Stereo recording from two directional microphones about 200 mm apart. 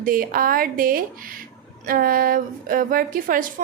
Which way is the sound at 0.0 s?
45° right (ahead or behind).